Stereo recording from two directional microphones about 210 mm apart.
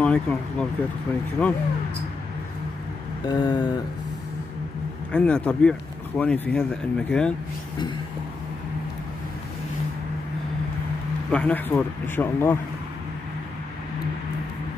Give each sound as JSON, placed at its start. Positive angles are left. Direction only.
{"t": 0.0, "sound": "speech", "side_deg": 5}
{"t": 3.3, "sound": "a sound", "side_deg": 20}
{"t": 5.1, "sound": "speech", "side_deg": 5}
{"t": 11.3, "sound": "speech", "side_deg": 5}